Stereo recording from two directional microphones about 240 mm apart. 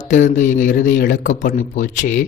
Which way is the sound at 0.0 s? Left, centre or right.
Left.